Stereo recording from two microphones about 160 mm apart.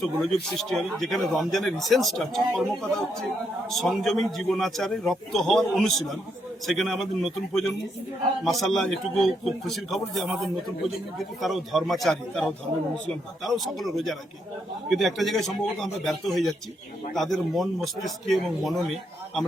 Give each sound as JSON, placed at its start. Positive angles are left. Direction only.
{"t": 0.4, "sound": "a man's voice", "side_deg": 0}